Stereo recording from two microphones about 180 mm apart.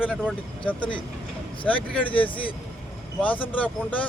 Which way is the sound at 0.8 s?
25° left (ahead or behind).